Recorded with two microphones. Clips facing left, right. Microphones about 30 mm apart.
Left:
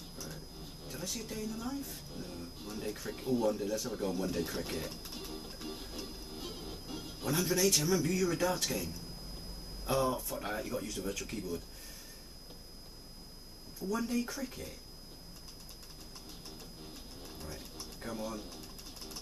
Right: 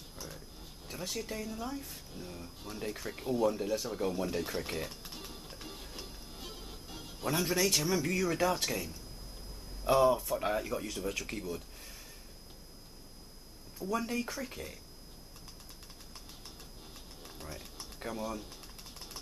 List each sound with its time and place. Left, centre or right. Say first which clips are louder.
0.3 s a sound: left 2 dB; centre
1.1 s speech: right 2 dB; centre
1.9 s speech: left 1 dB; centre
3.5 s speech: right 2 dB; right
3.8 s speech: right 1 dB; centre
5.7 s music: left 4 dB; centre
7.2 s speech: even; right
9.8 s speech: right 6 dB; centre
13.7 s speech: even; right
16.3 s music: left 2 dB; centre
17.6 s a sound: left 1 dB; centre
18.0 s speech: right 2 dB; centre
18.9 s music: even; centre